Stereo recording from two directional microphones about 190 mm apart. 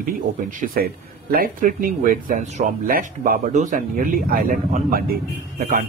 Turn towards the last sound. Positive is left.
turn(degrees=-50)  # may be behind; listen again after turning